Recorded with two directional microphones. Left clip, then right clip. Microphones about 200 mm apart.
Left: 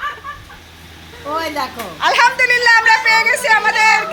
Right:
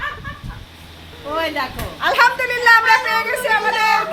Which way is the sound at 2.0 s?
Centre (ahead or behind).